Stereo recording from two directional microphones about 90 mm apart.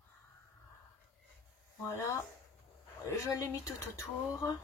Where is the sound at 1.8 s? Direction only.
30° left (ahead or behind).